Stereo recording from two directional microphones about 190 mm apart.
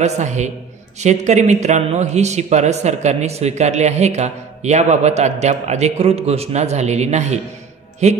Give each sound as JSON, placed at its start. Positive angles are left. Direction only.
{"t": 0.0, "sound": "a man's voice", "side_deg": -40}